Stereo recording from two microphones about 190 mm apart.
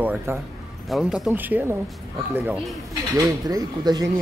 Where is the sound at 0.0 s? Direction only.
10° right (ahead or behind).